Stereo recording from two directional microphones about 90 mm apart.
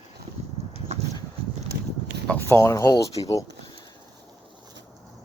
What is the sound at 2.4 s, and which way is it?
Speech, 30° left (ahead or behind).